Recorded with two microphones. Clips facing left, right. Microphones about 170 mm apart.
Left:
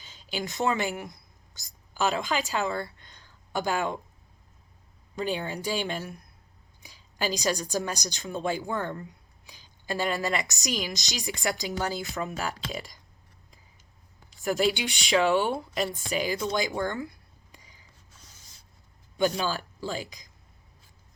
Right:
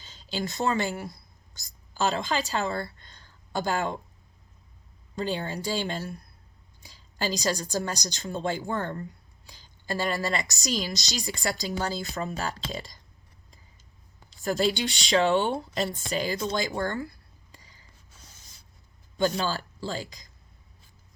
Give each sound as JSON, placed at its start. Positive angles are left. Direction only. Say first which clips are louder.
{"t": 0.0, "sound": "a woman's voice", "louder": "right 2 dB", "side_deg": 10}
{"t": 2.8, "sound": "a sound", "louder": "right 1 dB", "side_deg": 15}
{"t": 5.2, "sound": "a woman's voice", "louder": "even", "side_deg": 15}
{"t": 12.0, "sound": "speech", "louder": "even", "side_deg": -35}
{"t": 12.4, "sound": "a woman's voice", "louder": "even", "side_deg": 15}
{"t": 14.3, "sound": "speech", "louder": "even", "side_deg": 15}
{"t": 15.2, "sound": "speech", "louder": "even", "side_deg": -25}
{"t": 15.9, "sound": "a woman's voice", "louder": "even", "side_deg": 15}
{"t": 16.6, "sound": "a sound", "louder": "even", "side_deg": 15}
{"t": 19.4, "sound": "a woman's voice", "louder": "even", "side_deg": 15}